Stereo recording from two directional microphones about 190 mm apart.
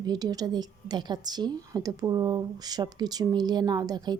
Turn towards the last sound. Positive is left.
turn(degrees=-20)  # may be behind; listen again after turning